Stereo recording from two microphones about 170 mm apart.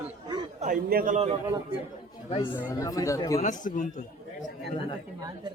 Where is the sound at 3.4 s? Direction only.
50° left (ahead or behind).